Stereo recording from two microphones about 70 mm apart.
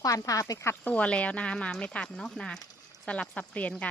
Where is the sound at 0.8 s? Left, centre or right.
Centre.